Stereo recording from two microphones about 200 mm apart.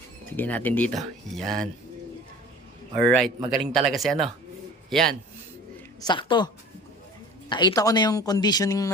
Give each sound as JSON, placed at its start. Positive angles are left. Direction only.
{"t": 0.3, "sound": "speech", "side_deg": 10}
{"t": 3.0, "sound": "a man's voice", "side_deg": 0}
{"t": 6.0, "sound": "speech", "side_deg": 20}
{"t": 7.5, "sound": "speech", "side_deg": 20}